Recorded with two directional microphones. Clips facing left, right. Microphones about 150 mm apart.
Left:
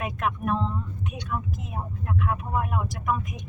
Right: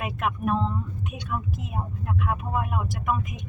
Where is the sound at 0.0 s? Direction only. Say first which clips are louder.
Right 1 dB; 5° right (ahead or behind).